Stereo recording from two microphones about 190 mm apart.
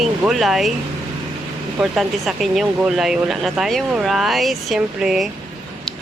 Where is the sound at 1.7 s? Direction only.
Centre (ahead or behind).